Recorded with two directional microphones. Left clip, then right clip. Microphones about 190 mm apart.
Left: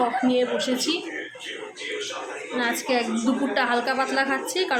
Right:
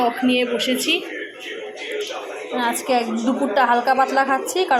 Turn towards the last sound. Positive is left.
turn(degrees=-10)  # may be behind; listen again after turning